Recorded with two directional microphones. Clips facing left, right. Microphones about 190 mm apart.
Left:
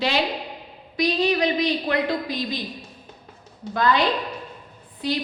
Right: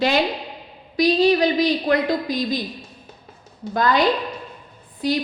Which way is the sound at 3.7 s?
40° right (ahead or behind).